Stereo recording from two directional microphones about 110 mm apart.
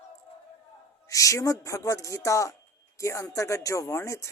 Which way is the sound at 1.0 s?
30° left (ahead or behind).